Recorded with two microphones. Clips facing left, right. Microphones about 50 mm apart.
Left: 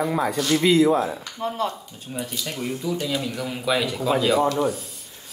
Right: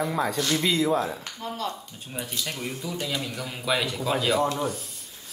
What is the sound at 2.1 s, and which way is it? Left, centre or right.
Speech, centre.